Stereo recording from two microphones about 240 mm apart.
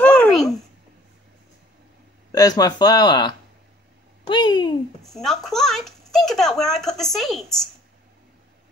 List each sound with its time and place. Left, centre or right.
0.0 s babbling: centre
2.3 s speech: centre
5.0 s speech: centre